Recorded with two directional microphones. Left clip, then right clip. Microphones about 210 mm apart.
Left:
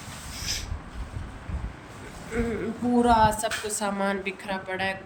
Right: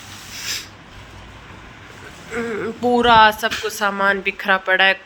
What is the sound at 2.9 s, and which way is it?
Speech, 25° right (ahead or behind).